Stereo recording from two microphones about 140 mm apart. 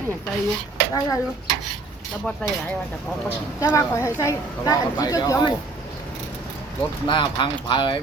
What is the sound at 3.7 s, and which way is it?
Speech, 20° left (ahead or behind).